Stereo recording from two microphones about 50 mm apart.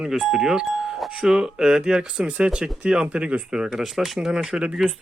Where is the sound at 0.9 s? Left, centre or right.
Centre.